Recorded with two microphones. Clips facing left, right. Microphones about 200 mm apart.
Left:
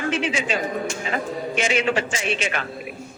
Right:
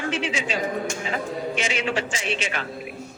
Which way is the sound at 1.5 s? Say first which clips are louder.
Left 7 dB; 55° left (ahead or behind).